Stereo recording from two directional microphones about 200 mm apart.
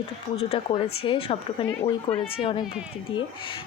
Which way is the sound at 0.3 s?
25° left (ahead or behind).